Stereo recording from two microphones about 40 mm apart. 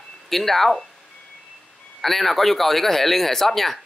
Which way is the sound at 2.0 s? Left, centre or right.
Centre.